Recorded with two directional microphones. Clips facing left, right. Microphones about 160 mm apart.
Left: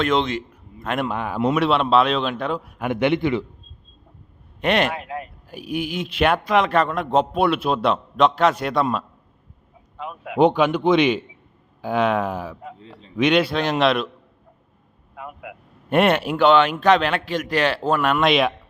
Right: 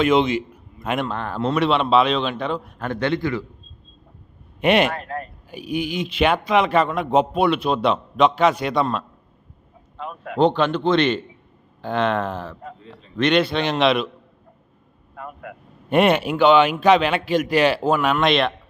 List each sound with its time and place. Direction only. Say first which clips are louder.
0.0 s a man's voice: right 3 dB; 5° right (ahead or behind)
0.9 s a man's voice: left 2 dB; 10° left (ahead or behind)
4.6 s a man's voice: right 3 dB; 5° right (ahead or behind)
15.1 s speech: right 1 dB; 5° left (ahead or behind)